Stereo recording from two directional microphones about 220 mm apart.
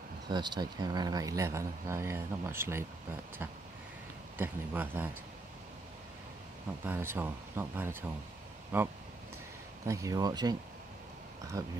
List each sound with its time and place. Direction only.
0.3 s speech: 20° right (ahead or behind)
6.9 s speech: 10° right (ahead or behind)